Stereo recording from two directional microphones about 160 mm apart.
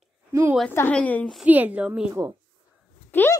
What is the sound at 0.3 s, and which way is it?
Speech, 15° right (ahead or behind).